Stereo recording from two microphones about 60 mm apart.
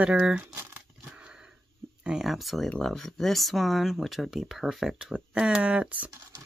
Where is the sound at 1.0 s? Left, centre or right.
Centre.